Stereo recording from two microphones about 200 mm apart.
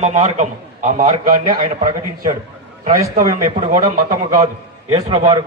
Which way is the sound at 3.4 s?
40° right (ahead or behind).